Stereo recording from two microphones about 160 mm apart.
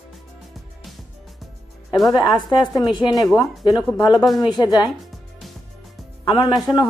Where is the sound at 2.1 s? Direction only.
25° left (ahead or behind).